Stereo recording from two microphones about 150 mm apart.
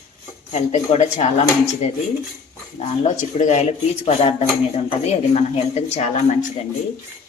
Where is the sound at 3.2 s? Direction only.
50° left (ahead or behind).